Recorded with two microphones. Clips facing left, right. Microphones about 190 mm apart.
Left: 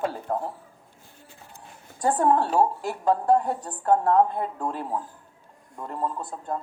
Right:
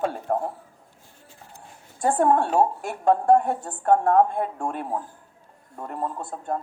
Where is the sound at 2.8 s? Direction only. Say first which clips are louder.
Right 3 dB; 50° right (ahead or behind).